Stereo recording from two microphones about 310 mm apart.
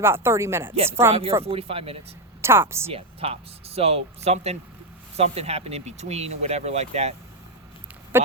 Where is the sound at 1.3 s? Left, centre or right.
Centre.